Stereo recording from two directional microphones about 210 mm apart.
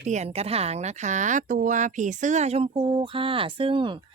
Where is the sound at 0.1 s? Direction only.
30° right (ahead or behind).